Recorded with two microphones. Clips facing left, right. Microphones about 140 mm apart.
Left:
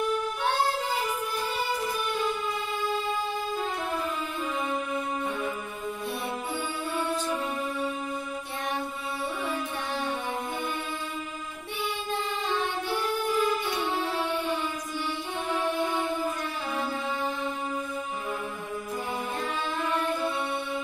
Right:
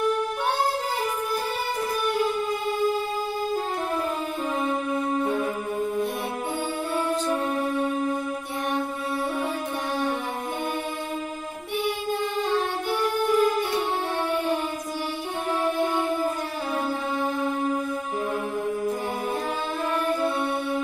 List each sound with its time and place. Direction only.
4.6 s music: 40° right (ahead or behind)
13.4 s music: 45° right (ahead or behind)
15.8 s music: 40° right (ahead or behind)